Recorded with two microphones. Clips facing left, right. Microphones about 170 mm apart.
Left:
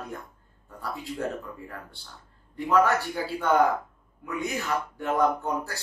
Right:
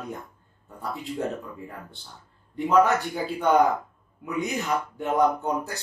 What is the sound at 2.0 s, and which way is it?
Speech, 20° right (ahead or behind).